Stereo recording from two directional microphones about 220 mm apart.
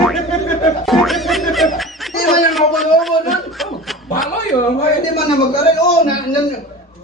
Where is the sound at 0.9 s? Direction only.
Centre (ahead or behind).